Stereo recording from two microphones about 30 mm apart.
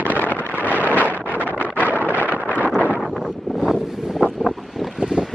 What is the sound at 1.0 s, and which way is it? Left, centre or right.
Wind noise, left.